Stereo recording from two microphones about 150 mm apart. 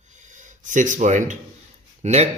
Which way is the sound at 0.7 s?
55° right (ahead or behind).